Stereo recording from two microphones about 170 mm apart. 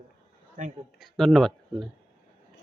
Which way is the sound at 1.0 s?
Centre (ahead or behind).